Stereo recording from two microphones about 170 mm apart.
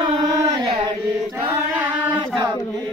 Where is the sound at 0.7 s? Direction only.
30° right (ahead or behind).